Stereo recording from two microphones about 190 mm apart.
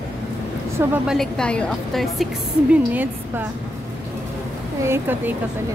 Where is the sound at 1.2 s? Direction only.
5° left (ahead or behind).